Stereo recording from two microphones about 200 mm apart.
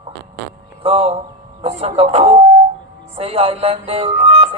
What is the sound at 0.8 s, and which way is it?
A man's voice, 30° right (ahead or behind).